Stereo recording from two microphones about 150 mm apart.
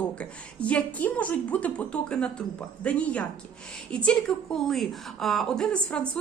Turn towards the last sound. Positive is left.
turn(degrees=5)  # may be behind; listen again after turning